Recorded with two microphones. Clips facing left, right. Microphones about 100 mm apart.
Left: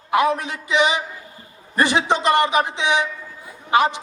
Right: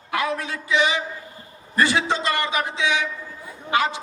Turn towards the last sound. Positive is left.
turn(degrees=20)  # may be behind; listen again after turning